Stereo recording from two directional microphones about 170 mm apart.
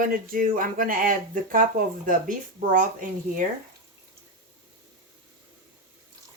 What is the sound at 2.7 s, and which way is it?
Speech, 50° right (ahead or behind).